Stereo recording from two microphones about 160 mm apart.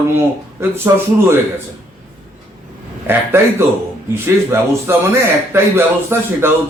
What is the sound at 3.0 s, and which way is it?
A man's voice, 15° right (ahead or behind).